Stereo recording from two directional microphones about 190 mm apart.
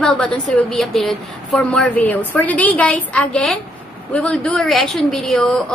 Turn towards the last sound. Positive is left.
turn(degrees=5)  # may be behind; listen again after turning